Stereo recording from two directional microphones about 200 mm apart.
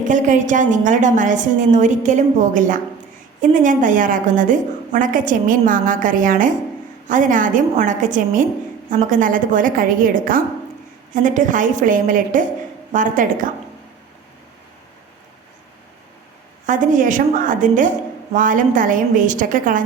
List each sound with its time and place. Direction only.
0.1 s a woman's voice: 40° right (ahead or behind)
16.6 s a woman's voice: 40° right (ahead or behind)